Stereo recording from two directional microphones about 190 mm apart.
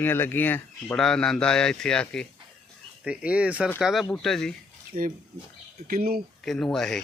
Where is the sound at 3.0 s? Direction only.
5° right (ahead or behind).